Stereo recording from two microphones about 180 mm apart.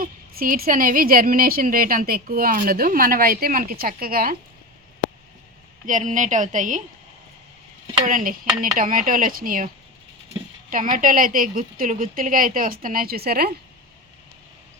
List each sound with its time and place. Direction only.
0.0 s a woman's voice: 55° right (ahead or behind)
5.8 s a woman's voice: 45° right (ahead or behind)
8.0 s a woman's voice: 50° right (ahead or behind)
10.7 s a woman's voice: 50° right (ahead or behind)